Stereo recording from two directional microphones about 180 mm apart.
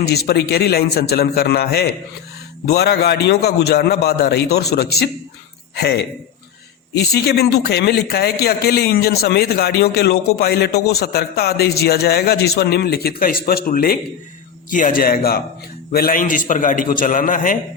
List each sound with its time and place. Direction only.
0.0 s a man's voice: 60° left (ahead or behind)